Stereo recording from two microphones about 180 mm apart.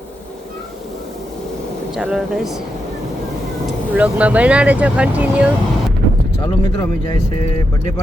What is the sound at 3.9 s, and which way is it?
Speech, 5° right (ahead or behind).